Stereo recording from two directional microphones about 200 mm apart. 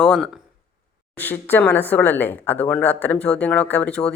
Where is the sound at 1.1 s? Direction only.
10° left (ahead or behind).